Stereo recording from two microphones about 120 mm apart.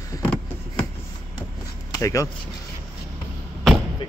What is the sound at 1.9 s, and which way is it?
Speech, 25° left (ahead or behind).